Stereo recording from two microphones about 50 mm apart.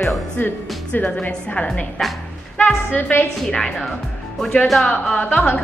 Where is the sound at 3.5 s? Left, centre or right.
Centre.